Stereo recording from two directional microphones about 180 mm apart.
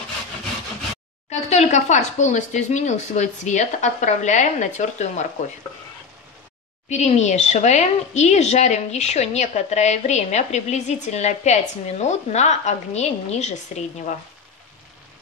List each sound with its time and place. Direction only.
1.3 s speech: 40° left (ahead or behind)
6.9 s speech: 40° left (ahead or behind)